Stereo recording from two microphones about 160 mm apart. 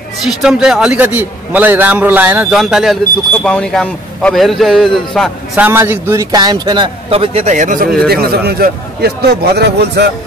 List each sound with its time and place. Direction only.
0.2 s a man's voice: centre (ahead or behind)
5.6 s a man's voice: 15° right (ahead or behind); by 7.5 s 40° right (ahead or behind)
7.5 s speech: 55° right (ahead or behind)
8.1 s a man's voice: 75° right (ahead or behind)